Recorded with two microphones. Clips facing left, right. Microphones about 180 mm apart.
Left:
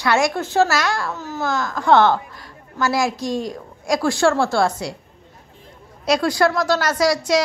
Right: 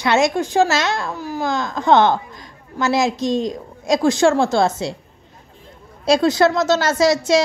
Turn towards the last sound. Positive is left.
turn(degrees=-25)  # may be behind; listen again after turning